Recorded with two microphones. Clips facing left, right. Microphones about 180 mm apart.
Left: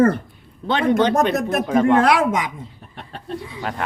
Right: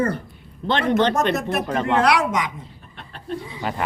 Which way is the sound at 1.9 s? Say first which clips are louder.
Left 3 dB; 45° left (ahead or behind).